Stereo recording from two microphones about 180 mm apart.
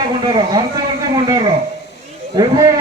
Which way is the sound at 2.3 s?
20° right (ahead or behind).